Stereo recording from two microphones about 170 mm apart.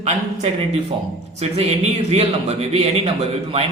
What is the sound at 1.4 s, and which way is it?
A man's voice, 40° right (ahead or behind).